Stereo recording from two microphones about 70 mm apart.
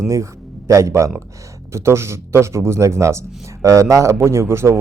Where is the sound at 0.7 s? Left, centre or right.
Right.